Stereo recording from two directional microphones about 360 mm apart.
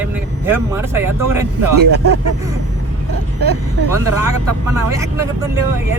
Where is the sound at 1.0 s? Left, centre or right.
Right.